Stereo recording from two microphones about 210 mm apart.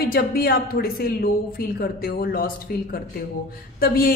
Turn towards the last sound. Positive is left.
turn(degrees=45)  # may be behind; listen again after turning